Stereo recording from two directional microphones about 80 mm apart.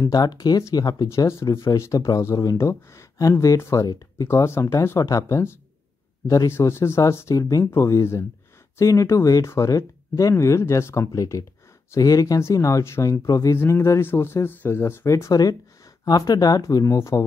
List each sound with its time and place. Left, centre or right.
0.0 s speech: left
1.0 s speech: left
3.8 s speech: left
4.3 s speech: left
11.9 s speech: left